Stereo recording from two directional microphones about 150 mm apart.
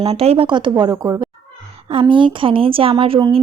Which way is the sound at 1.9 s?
35° right (ahead or behind).